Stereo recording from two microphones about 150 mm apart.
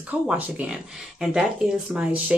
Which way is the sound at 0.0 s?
10° right (ahead or behind).